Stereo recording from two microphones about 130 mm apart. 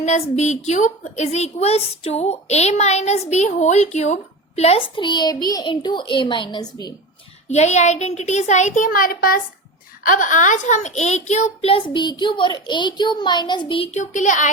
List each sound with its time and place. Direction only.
0.0 s a woman's voice: 60° left (ahead or behind)
4.9 s a child's voice: 35° left (ahead or behind)
7.5 s a woman's voice: 60° left (ahead or behind); by 13.9 s 40° left (ahead or behind)
13.9 s speech: 70° left (ahead or behind)